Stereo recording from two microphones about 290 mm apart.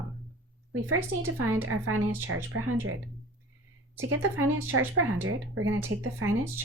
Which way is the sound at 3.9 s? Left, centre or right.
Right.